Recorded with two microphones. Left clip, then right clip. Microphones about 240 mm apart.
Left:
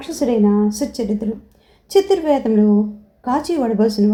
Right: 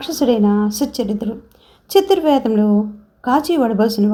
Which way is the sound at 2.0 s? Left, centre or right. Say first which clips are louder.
Right 2 dB; right.